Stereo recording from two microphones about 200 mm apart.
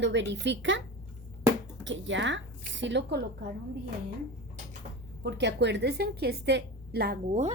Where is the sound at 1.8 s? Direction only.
65° right (ahead or behind).